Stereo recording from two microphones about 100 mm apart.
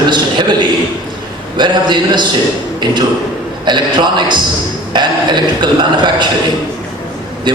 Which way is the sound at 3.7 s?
50° right (ahead or behind).